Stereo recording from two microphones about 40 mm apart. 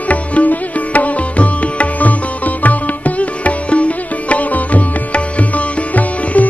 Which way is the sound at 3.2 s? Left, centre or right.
Left.